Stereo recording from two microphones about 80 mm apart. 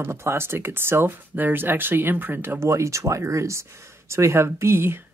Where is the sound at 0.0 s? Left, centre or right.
Right.